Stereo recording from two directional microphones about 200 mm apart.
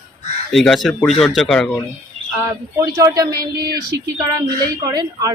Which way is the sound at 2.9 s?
15° right (ahead or behind).